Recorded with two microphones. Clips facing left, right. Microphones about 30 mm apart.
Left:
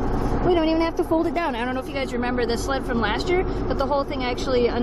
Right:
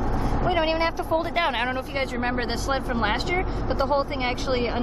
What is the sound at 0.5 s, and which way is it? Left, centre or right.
Speech, right.